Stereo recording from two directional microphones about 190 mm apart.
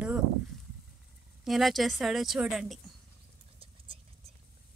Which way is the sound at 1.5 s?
Centre (ahead or behind).